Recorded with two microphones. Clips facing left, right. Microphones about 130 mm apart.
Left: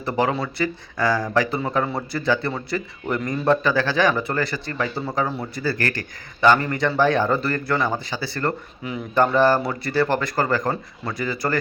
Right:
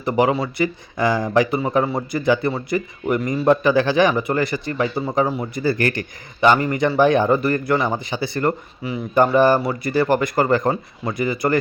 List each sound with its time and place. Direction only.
0.0 s speech: 15° right (ahead or behind)
8.8 s speech: 5° right (ahead or behind)